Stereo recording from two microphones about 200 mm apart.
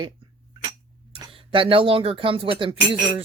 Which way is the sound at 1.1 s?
25° right (ahead or behind).